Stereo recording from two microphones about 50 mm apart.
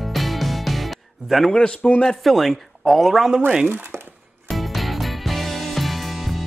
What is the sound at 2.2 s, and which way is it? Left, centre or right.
Speech, centre.